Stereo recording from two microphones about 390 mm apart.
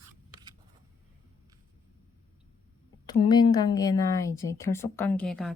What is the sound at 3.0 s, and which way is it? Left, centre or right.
A woman's voice, centre.